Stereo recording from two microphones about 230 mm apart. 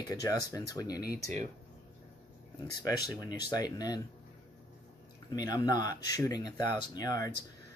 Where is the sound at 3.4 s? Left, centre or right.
Centre.